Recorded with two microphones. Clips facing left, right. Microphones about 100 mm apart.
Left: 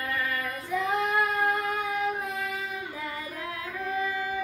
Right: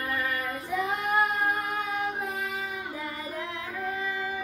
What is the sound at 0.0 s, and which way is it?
Child singing, 25° right (ahead or behind).